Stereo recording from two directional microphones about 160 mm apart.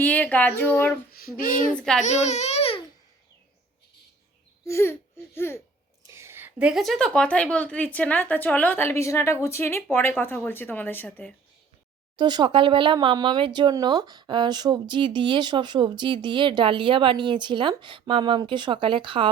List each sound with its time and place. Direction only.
0.0 s a woman's voice: 10° left (ahead or behind)
1.2 s speech: 60° left (ahead or behind)
1.7 s a child's voice: 5° left (ahead or behind)
2.0 s baby cry: 45° left (ahead or behind)
4.6 s speech: 15° left (ahead or behind)
6.1 s a woman's voice: 15° right (ahead or behind); by 11.3 s 10° left (ahead or behind)
12.1 s speech: 30° right (ahead or behind)